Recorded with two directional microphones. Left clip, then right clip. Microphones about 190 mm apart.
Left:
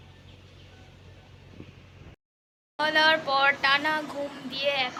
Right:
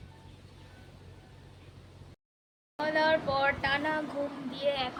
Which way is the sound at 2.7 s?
10° right (ahead or behind).